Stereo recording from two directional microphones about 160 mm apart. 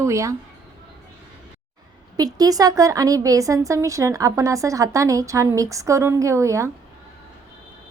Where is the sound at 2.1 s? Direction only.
25° right (ahead or behind).